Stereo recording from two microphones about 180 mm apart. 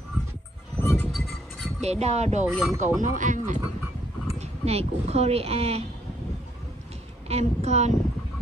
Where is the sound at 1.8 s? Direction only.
35° right (ahead or behind).